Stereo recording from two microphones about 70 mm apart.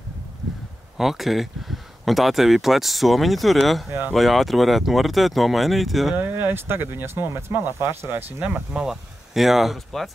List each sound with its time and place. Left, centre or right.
0.9 s speech: centre
6.1 s speech: right
8.4 s speech: right
8.8 s speech: centre